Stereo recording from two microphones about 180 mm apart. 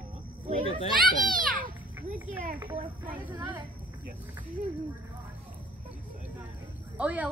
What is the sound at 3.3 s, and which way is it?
Speech, 25° right (ahead or behind).